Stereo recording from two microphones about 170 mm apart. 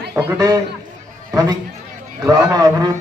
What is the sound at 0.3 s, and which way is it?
Speech, 20° right (ahead or behind).